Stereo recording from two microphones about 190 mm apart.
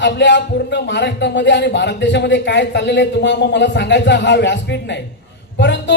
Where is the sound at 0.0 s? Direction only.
65° left (ahead or behind).